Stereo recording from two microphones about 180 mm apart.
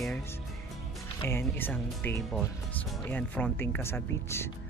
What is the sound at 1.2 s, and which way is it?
Speech, 10° left (ahead or behind).